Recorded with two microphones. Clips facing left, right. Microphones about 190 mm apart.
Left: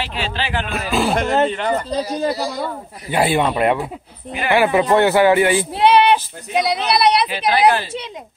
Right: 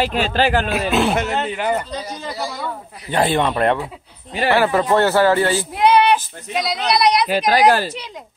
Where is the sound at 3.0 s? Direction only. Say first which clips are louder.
Left 1 dB; 10° left (ahead or behind).